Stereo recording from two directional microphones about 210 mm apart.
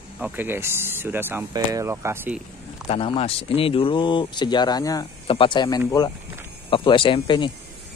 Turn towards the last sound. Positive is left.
turn(degrees=25)  # may be behind; listen again after turning